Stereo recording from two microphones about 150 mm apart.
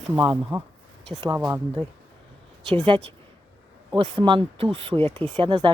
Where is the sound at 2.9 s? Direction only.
35° right (ahead or behind).